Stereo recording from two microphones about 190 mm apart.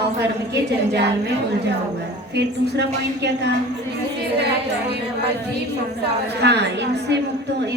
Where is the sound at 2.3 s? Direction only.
65° right (ahead or behind).